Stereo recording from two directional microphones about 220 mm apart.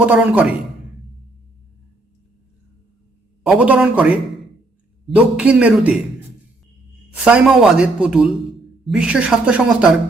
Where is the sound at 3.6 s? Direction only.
5° right (ahead or behind).